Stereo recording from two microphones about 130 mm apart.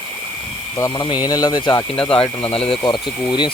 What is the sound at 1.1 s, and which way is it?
Speech, 30° left (ahead or behind).